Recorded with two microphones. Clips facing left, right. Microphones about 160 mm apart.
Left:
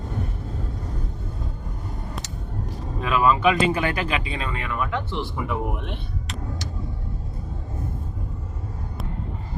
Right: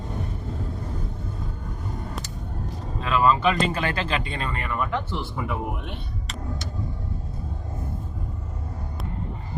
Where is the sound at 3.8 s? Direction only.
15° left (ahead or behind).